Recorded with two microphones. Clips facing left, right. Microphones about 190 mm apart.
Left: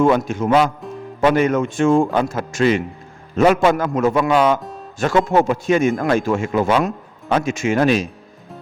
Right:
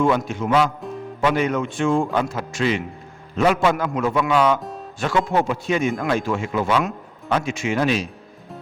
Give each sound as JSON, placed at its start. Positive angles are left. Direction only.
{"t": 0.0, "sound": "a man's voice", "side_deg": 45}